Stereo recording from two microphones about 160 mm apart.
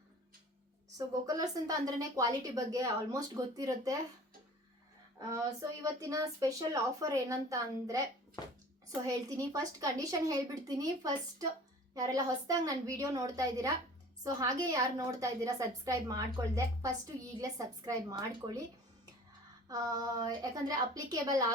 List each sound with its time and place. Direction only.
0.9 s a woman's voice: 25° right (ahead or behind)
5.3 s a woman's voice: 20° right (ahead or behind)
9.0 s a woman's voice: 20° right (ahead or behind)
19.6 s a woman's voice: 25° right (ahead or behind)